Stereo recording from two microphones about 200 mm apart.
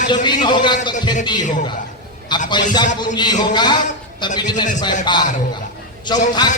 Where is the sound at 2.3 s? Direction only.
20° left (ahead or behind).